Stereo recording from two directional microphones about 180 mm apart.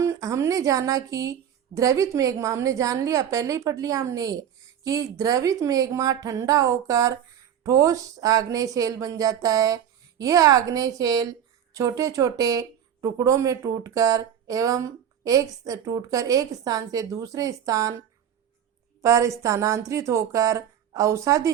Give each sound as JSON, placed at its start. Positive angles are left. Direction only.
{"t": 0.0, "sound": "speech", "side_deg": -15}
{"t": 19.0, "sound": "speech", "side_deg": -20}